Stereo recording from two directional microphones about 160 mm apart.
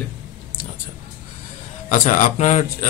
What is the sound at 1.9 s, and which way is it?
A man's voice, 55° left (ahead or behind).